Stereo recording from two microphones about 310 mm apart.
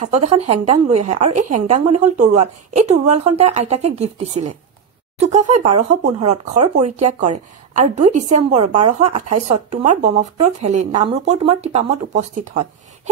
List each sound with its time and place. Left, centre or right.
0.0 s a woman's voice: right
9.2 s speech: right
9.8 s a woman's voice: right